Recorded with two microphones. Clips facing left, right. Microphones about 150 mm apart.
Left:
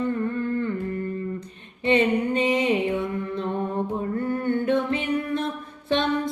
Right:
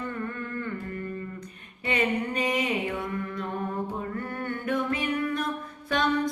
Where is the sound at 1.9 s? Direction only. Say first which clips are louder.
Left 7 dB; 25° left (ahead or behind).